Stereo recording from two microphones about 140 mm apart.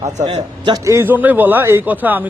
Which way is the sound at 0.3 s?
35° right (ahead or behind).